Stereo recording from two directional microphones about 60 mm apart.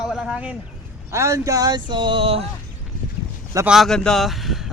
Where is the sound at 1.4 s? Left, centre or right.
Right.